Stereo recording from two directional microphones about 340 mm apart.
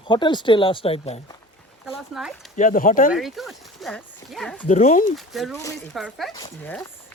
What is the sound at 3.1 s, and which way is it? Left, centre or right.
Speech, centre.